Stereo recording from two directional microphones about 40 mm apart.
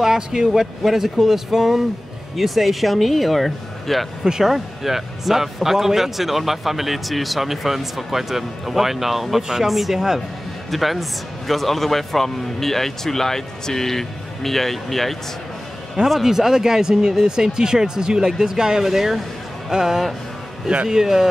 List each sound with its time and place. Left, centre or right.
0.0 s speech: centre
4.2 s speech: centre
10.7 s a man's voice: centre
16.1 s speech: centre